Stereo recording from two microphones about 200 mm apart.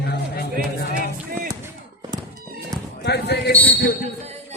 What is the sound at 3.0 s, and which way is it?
Speech, 55° left (ahead or behind).